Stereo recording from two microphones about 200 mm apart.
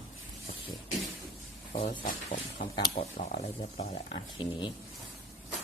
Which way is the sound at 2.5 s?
45° left (ahead or behind).